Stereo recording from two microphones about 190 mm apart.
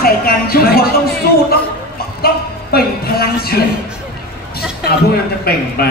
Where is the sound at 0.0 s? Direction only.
50° left (ahead or behind).